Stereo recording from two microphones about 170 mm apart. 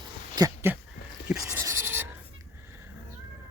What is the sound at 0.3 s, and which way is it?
Speech, 15° right (ahead or behind).